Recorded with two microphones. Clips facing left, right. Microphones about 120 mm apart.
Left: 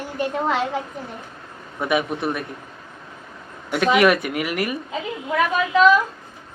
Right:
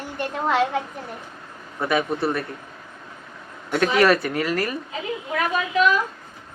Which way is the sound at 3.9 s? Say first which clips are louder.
Even; 15° left (ahead or behind).